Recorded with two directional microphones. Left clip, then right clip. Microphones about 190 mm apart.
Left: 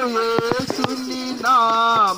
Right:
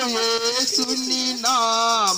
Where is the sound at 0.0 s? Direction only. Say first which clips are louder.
Left 2 dB; 45° right (ahead or behind).